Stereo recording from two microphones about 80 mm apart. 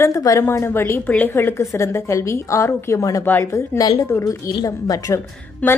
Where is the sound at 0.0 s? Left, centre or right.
Left.